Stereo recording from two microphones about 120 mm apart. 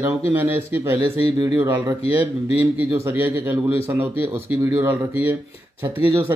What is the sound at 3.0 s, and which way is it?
A man's voice, 15° right (ahead or behind).